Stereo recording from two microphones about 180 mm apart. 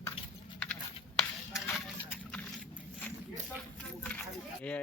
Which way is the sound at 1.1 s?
Centre (ahead or behind).